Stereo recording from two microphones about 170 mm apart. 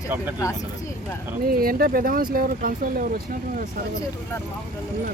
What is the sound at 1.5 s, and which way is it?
Speech, 60° right (ahead or behind).